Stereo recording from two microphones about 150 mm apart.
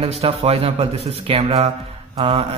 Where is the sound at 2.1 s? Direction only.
40° right (ahead or behind).